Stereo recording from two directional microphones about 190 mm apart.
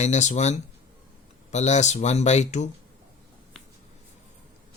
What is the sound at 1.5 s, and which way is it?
Speech, 35° left (ahead or behind).